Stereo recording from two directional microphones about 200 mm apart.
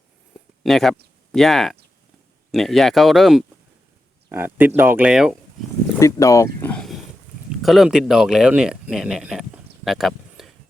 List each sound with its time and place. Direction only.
0.6 s speech: centre (ahead or behind)
6.0 s speech: 15° left (ahead or behind); by 10.5 s centre (ahead or behind)